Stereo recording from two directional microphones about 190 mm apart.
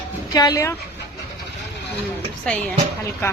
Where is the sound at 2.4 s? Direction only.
10° left (ahead or behind).